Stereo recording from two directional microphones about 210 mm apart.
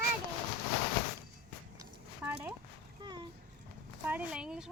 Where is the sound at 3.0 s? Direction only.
20° right (ahead or behind).